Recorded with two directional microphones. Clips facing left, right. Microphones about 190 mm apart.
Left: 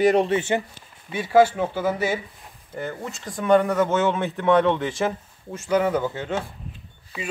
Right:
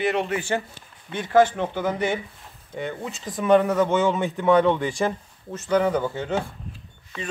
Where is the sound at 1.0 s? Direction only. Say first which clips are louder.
Left 1 dB; 5° left (ahead or behind).